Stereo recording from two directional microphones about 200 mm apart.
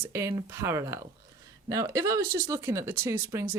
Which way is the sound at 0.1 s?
15° right (ahead or behind).